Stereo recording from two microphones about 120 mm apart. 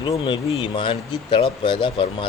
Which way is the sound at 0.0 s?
40° left (ahead or behind).